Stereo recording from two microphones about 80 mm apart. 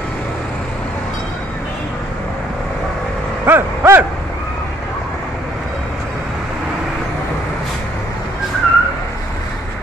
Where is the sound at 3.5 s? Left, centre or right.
Right.